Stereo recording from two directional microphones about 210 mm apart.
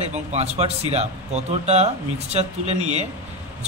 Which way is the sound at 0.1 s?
30° right (ahead or behind).